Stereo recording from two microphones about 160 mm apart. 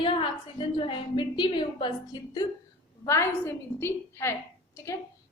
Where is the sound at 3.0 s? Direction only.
15° left (ahead or behind).